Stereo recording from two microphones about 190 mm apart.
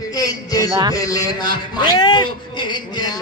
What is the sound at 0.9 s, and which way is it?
A man's voice, 20° left (ahead or behind).